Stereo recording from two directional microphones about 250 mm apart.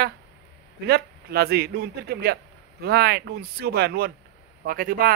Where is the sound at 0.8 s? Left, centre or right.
Right.